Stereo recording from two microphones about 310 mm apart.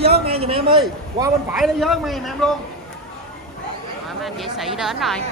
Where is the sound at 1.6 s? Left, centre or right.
Centre.